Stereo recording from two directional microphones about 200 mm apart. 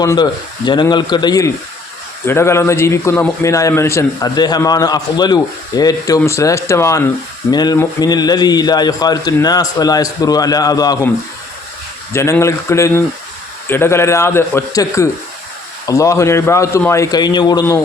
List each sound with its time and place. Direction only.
0.0 s a man's voice: 20° left (ahead or behind)
12.1 s a man's voice: 15° left (ahead or behind)